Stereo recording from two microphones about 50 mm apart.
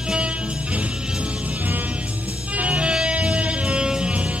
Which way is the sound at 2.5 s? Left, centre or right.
Right.